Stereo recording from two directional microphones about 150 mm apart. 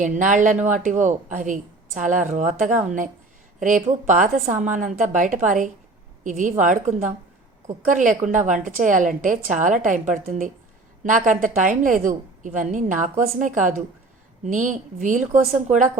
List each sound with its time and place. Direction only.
0.0 s a woman's voice: 60° right (ahead or behind)